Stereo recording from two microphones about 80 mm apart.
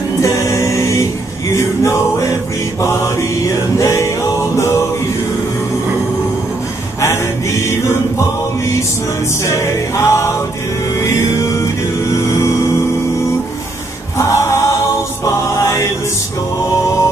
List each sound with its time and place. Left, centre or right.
0.2 s a capella: left
1.5 s music: left
7.0 s music: left
14.1 s choir: left
15.2 s music: left